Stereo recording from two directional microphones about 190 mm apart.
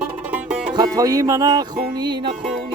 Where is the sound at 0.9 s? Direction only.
20° right (ahead or behind).